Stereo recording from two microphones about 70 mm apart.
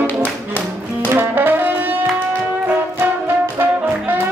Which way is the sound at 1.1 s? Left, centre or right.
Right.